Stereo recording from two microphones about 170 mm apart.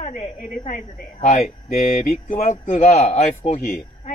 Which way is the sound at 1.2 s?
40° left (ahead or behind).